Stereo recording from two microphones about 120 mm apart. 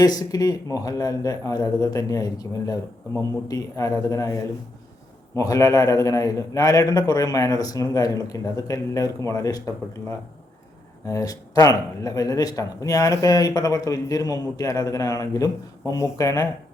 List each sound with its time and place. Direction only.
0.0 s speech: 30° left (ahead or behind)
11.0 s speech: 30° left (ahead or behind)